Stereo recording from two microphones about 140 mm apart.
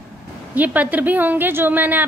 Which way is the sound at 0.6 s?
10° right (ahead or behind).